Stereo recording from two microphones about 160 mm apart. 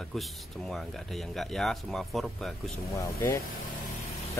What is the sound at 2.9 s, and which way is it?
Speech, 20° left (ahead or behind).